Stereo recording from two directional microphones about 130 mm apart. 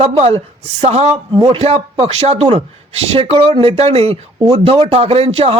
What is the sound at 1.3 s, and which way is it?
A man's voice, 40° right (ahead or behind).